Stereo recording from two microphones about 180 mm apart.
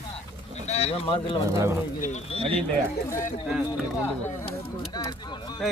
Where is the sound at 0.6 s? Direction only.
35° left (ahead or behind).